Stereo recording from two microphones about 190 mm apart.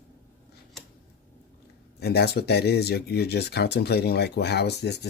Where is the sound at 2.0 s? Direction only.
60° left (ahead or behind).